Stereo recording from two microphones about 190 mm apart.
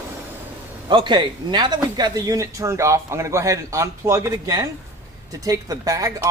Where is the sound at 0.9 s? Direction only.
25° right (ahead or behind).